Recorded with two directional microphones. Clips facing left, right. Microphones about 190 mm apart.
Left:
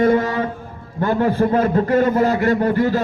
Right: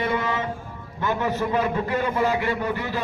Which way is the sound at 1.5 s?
40° left (ahead or behind).